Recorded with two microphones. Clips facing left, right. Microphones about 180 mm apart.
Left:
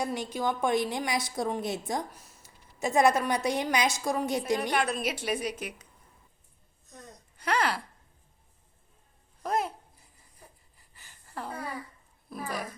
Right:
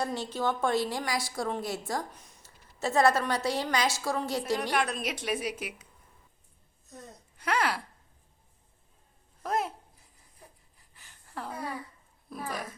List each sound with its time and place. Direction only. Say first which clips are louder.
0.0 s a woman's voice: even; 10° left (ahead or behind)
2.1 s a woman's voice: left 1 dB; 5° left (ahead or behind)
4.7 s a woman's voice: left 1 dB; centre (ahead or behind)
6.9 s a sound: right 2 dB; 5° right (ahead or behind)
9.4 s a sound: left 1 dB; centre (ahead or behind)
12.3 s a woman's voice: left 1 dB; centre (ahead or behind)